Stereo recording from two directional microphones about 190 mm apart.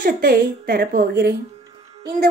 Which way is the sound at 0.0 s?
50° right (ahead or behind).